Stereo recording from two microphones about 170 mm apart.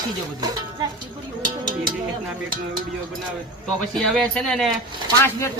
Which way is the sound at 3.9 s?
5° left (ahead or behind).